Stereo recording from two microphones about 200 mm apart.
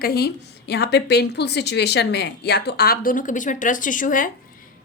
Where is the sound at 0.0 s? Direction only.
50° left (ahead or behind).